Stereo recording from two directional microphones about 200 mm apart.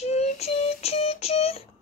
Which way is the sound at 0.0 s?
35° left (ahead or behind).